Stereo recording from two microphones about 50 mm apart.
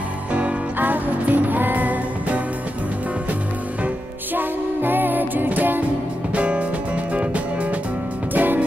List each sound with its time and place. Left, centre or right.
0.3 s music: right
0.7 s music: right
4.4 s music: right
6.3 s music: right
8.4 s music: right